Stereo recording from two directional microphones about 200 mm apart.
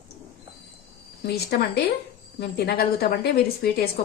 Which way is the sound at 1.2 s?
55° left (ahead or behind).